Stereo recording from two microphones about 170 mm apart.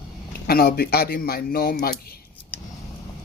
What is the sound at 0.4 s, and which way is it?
Speech, 65° left (ahead or behind).